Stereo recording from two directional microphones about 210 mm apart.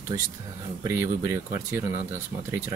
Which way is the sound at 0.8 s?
15° right (ahead or behind).